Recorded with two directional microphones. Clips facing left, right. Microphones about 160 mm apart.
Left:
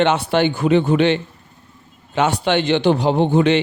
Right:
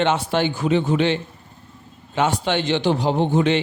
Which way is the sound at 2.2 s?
65° left (ahead or behind).